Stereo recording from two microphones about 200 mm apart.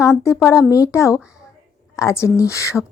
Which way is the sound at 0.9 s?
15° left (ahead or behind).